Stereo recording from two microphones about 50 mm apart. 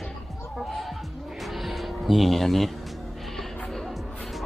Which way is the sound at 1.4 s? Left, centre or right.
Centre.